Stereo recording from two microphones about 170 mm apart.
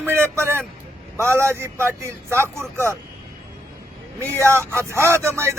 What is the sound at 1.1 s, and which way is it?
Speech, 15° right (ahead or behind).